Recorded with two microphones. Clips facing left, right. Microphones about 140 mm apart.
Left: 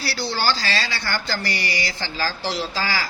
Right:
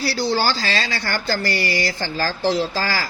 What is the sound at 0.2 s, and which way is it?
Speech, 45° right (ahead or behind).